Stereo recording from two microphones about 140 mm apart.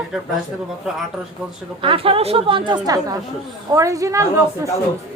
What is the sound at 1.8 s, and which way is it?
A woman's voice, 40° right (ahead or behind).